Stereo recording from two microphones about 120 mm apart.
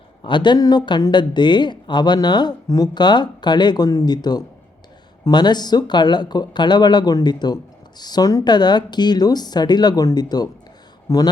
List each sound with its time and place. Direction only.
0.2 s speech: 40° left (ahead or behind)